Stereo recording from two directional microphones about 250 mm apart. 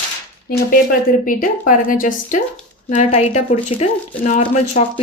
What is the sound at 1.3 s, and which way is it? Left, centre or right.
Speech, left.